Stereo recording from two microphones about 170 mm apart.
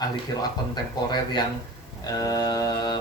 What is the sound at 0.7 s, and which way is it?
Speech, 25° left (ahead or behind).